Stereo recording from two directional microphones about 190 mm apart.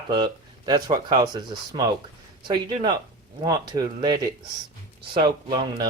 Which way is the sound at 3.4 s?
20° right (ahead or behind).